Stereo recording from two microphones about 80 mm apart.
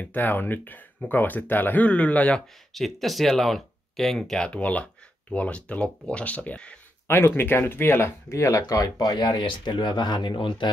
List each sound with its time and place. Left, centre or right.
0.0 s speech: left
2.7 s speech: centre
7.1 s speech: left